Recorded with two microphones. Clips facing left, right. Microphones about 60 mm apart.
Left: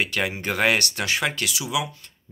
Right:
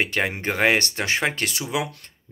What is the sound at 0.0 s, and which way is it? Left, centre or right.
Speech, right.